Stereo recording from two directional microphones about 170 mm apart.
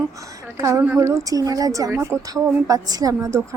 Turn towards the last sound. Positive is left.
turn(degrees=-15)  # may be behind; listen again after turning